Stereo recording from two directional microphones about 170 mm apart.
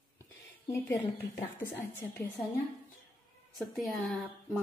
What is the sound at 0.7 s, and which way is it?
A woman's voice, 15° left (ahead or behind).